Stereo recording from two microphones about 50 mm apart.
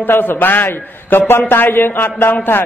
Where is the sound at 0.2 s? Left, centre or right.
Left.